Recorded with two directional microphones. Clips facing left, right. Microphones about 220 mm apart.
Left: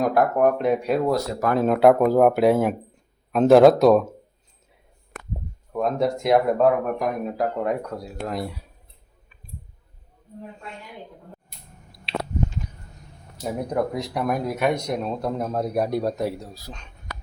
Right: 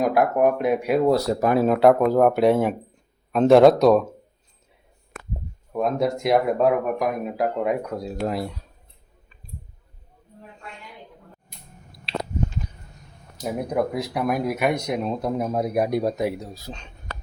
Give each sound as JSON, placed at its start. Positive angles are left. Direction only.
{"t": 0.0, "sound": "speech", "side_deg": -10}
{"t": 1.0, "sound": "speech", "side_deg": -35}
{"t": 1.5, "sound": "speech", "side_deg": 0}
{"t": 5.7, "sound": "speech", "side_deg": -5}
{"t": 13.4, "sound": "speech", "side_deg": -10}